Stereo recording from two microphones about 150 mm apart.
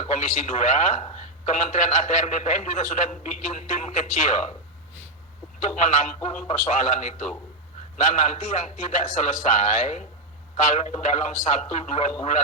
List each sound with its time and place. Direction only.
0.0 s a man's voice: 55° left (ahead or behind)
5.5 s a man's voice: 55° left (ahead or behind)